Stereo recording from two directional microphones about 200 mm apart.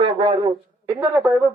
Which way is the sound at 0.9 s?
Centre (ahead or behind).